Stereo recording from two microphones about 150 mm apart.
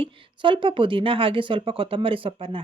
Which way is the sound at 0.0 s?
35° right (ahead or behind).